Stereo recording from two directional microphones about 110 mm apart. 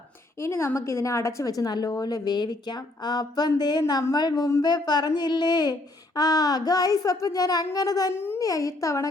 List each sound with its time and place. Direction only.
0.3 s a woman's voice: 25° left (ahead or behind)
8.1 s a child's voice: 20° left (ahead or behind)
8.4 s a woman's voice: 30° left (ahead or behind)